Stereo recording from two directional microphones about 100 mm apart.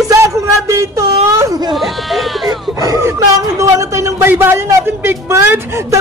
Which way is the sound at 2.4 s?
35° right (ahead or behind).